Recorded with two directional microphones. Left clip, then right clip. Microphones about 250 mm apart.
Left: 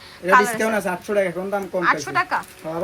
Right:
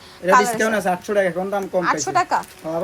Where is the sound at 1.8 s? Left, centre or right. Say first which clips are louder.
Even; centre.